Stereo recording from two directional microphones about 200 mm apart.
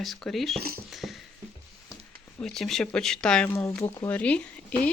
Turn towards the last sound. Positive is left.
turn(degrees=5)  # may be behind; listen again after turning